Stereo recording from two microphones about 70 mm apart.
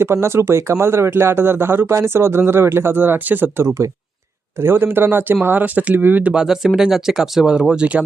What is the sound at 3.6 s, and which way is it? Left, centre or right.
Speech, right.